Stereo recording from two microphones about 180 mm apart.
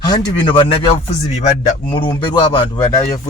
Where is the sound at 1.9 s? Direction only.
25° left (ahead or behind).